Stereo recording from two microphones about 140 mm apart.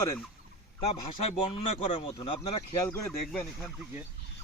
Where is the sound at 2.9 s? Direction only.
5° left (ahead or behind).